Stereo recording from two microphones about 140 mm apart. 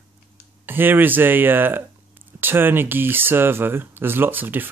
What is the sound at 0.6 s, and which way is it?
Speech, 15° right (ahead or behind).